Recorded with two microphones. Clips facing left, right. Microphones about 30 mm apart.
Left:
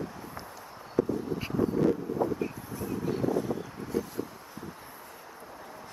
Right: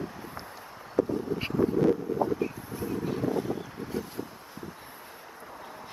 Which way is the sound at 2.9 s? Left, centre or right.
Centre.